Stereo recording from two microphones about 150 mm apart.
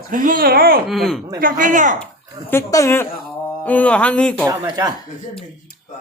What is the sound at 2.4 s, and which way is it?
Speech, 20° left (ahead or behind).